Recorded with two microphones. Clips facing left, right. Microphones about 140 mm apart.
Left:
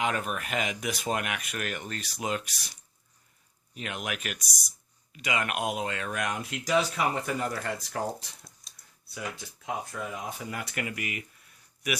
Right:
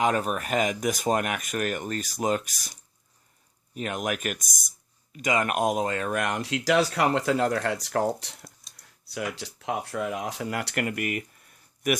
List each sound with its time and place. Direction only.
0.0 s speech: 40° right (ahead or behind)
3.8 s speech: 40° right (ahead or behind)